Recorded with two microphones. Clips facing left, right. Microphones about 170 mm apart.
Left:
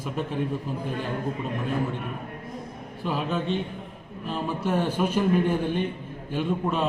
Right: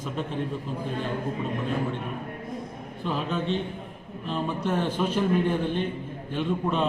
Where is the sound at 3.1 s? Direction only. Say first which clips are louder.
Left 1 dB; 5° left (ahead or behind).